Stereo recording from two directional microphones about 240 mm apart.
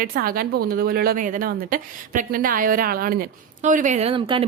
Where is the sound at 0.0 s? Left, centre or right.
Right.